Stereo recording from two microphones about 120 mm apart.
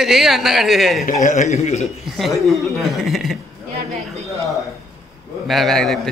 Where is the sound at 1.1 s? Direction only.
90° left; by 1.8 s 70° left (ahead or behind).